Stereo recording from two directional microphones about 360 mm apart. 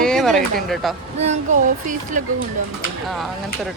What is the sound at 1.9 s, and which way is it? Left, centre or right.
Speech, right.